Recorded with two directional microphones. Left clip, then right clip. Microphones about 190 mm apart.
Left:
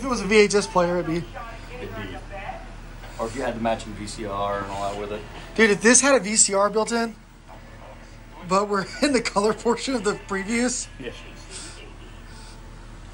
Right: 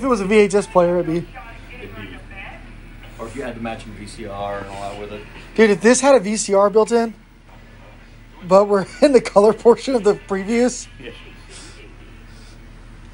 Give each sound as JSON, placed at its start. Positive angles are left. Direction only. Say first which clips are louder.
{"t": 0.0, "sound": "speech", "louder": "right 4 dB", "side_deg": 0}
{"t": 3.4, "sound": "speech", "louder": "left 4 dB", "side_deg": 60}
{"t": 5.5, "sound": "speech", "louder": "right 4 dB", "side_deg": 5}
{"t": 8.5, "sound": "speech", "louder": "right 9 dB", "side_deg": 0}